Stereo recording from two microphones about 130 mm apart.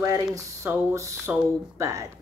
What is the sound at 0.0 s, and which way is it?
Speech, 25° right (ahead or behind).